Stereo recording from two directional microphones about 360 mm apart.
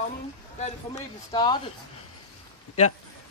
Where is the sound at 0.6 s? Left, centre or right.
Centre.